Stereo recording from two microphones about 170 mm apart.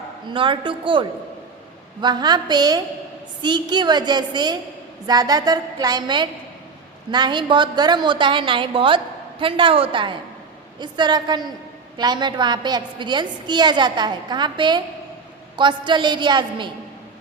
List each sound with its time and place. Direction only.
0.3 s a woman's voice: 30° right (ahead or behind)